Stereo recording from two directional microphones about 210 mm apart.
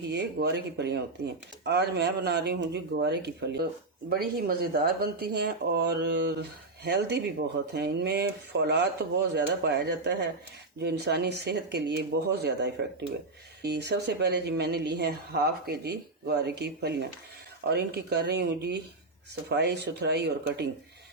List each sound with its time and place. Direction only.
0.1 s speech: 55° right (ahead or behind)